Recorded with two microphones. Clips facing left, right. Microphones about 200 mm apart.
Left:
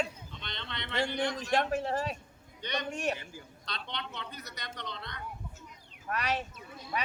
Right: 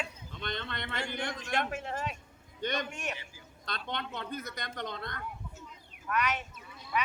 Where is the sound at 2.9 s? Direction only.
35° left (ahead or behind).